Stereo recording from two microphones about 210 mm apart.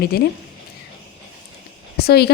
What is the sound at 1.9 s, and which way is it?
Speech, 50° left (ahead or behind).